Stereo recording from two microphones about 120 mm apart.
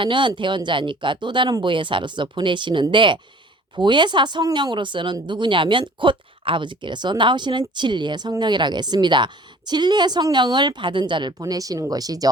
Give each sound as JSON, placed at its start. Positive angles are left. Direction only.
{"t": 0.0, "sound": "a woman's voice", "side_deg": -40}